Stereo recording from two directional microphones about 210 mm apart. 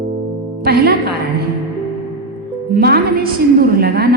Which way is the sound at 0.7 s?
50° right (ahead or behind).